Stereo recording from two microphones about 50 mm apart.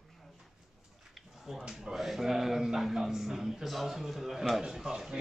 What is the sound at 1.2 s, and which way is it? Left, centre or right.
A man's voice, centre.